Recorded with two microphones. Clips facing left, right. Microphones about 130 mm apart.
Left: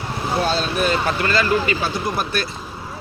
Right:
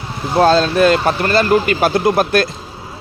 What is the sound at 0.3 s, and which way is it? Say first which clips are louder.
Speech: right 10 dB; 90° right.